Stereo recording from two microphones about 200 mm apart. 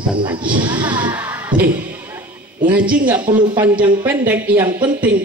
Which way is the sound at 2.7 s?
5° right (ahead or behind).